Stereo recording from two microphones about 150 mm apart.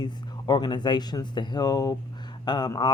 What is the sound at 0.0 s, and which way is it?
Speech, 30° left (ahead or behind).